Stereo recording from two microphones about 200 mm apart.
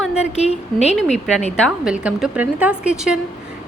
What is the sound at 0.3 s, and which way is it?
Speech, 30° left (ahead or behind).